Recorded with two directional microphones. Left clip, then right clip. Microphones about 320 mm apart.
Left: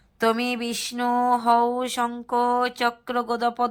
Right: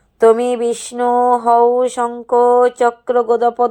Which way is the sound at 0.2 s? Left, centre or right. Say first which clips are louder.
Right 12 dB; centre.